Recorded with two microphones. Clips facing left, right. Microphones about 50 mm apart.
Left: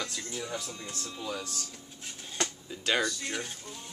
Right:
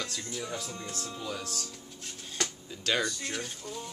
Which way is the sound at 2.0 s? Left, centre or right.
Centre.